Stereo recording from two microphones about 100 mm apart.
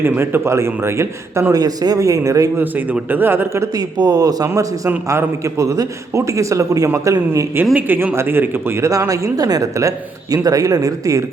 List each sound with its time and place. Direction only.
0.0 s a man's voice: 20° right (ahead or behind)
2.6 s a man's voice: 20° right (ahead or behind)
3.8 s a man's voice: 40° right (ahead or behind)
7.6 s a man's voice: 20° right (ahead or behind); by 11.2 s 35° right (ahead or behind)